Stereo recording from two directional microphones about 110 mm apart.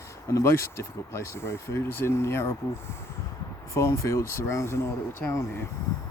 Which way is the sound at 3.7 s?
25° left (ahead or behind).